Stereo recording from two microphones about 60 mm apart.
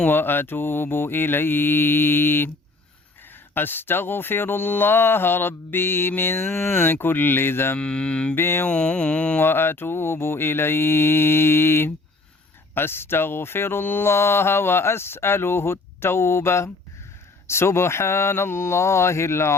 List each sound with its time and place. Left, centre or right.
0.0 s speech: left
3.5 s speech: left
7.8 s mantra: centre
8.4 s speech: left
8.6 s mantra: centre
9.4 s speech: left